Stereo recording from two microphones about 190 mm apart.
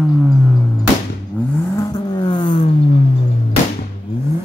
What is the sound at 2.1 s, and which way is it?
Zipper, 25° left (ahead or behind).